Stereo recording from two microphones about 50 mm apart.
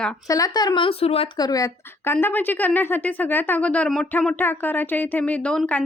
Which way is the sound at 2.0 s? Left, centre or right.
Left.